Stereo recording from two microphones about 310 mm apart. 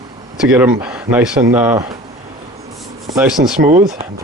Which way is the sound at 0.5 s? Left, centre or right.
Centre.